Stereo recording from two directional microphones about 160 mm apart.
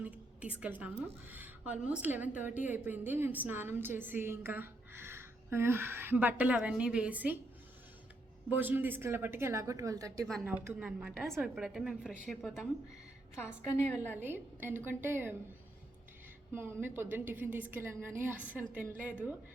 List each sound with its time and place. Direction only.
0.0 s a woman's voice: 10° right (ahead or behind)
8.4 s a woman's voice: 10° right (ahead or behind)
13.6 s a woman's voice: 45° right (ahead or behind)
14.2 s a woman's voice: 10° right (ahead or behind)
16.6 s a woman's voice: 10° right (ahead or behind)